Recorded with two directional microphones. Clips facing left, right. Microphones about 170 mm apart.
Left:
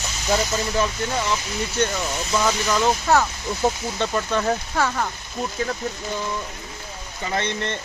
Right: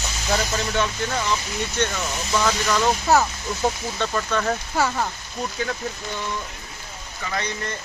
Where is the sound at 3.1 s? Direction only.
5° right (ahead or behind).